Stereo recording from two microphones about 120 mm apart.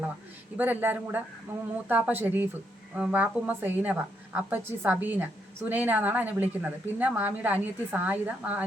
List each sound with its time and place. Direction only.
0.5 s a woman's voice: 15° right (ahead or behind)